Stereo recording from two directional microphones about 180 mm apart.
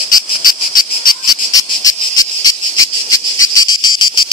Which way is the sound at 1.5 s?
20° left (ahead or behind).